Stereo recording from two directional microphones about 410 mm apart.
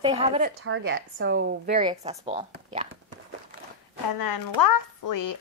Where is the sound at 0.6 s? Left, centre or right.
Right.